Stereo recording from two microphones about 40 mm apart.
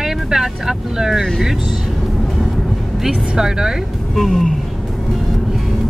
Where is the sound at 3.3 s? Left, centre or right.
Centre.